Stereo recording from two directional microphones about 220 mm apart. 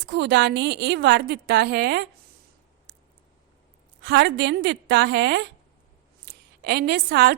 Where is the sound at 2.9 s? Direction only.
45° right (ahead or behind).